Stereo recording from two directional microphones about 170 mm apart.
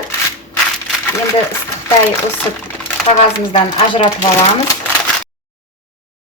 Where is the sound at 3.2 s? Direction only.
35° left (ahead or behind).